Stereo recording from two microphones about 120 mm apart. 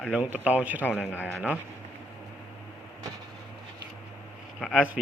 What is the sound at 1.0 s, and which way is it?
Speech, 15° left (ahead or behind).